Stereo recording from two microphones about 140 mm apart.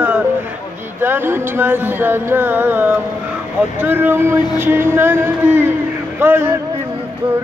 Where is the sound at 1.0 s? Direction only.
15° right (ahead or behind).